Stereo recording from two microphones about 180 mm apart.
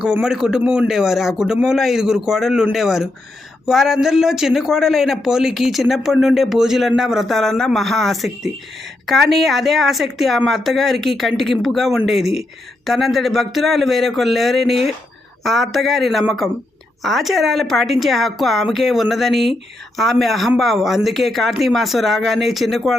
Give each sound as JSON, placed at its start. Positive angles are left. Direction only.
{"t": 0.0, "sound": "speech", "side_deg": -5}